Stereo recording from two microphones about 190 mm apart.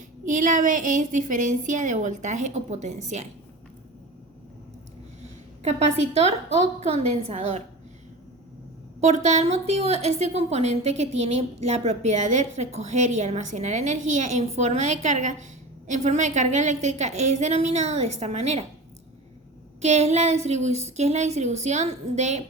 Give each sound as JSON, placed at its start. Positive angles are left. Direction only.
{"t": 0.3, "sound": "a woman's voice", "side_deg": -45}
{"t": 5.2, "sound": "a woman's voice", "side_deg": -35}
{"t": 9.0, "sound": "a woman's voice", "side_deg": -35}
{"t": 19.8, "sound": "a woman's voice", "side_deg": -35}